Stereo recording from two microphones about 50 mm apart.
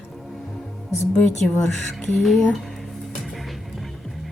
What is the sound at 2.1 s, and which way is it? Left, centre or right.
Music, centre.